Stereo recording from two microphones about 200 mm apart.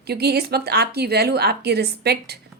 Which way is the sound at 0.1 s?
55° right (ahead or behind).